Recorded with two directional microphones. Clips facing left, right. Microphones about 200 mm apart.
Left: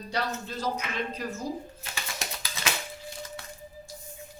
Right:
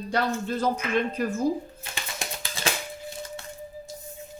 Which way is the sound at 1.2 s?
55° right (ahead or behind).